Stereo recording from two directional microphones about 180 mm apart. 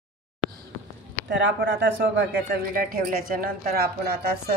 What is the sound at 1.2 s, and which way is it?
Speech, 85° right.